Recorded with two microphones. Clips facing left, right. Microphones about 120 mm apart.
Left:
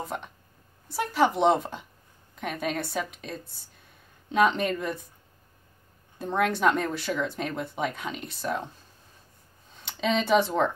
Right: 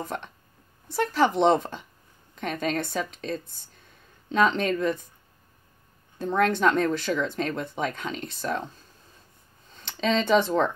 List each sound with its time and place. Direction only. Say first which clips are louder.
0.8 s speech: right 1 dB; 10° left (ahead or behind)
6.1 s speech: right 3 dB; 10° left (ahead or behind)
9.8 s speech: right 1 dB; 10° left (ahead or behind)